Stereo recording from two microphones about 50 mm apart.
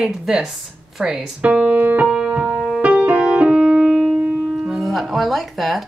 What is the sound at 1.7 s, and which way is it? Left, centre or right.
Keyboard, right.